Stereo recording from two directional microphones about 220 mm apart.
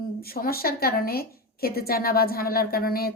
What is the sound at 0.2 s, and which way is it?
A woman's voice, 45° left (ahead or behind).